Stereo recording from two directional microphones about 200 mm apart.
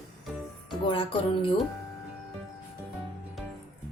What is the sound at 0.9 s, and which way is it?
Speech, 25° left (ahead or behind).